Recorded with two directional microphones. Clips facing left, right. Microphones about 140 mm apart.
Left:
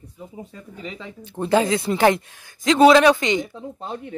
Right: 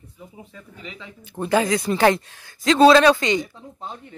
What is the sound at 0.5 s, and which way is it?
Speech, 35° left (ahead or behind).